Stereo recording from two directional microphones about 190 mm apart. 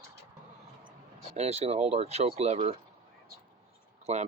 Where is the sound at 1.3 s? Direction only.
35° right (ahead or behind).